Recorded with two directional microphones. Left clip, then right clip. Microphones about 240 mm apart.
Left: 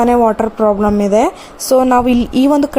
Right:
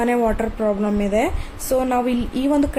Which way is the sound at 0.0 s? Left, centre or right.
Left.